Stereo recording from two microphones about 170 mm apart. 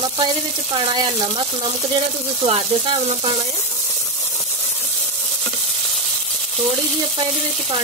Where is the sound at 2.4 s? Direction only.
35° right (ahead or behind).